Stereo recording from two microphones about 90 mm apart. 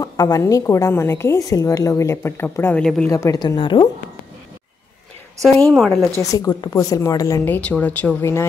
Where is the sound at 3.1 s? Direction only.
35° left (ahead or behind).